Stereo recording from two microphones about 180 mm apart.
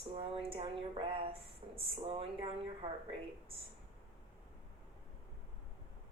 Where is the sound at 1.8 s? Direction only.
30° right (ahead or behind).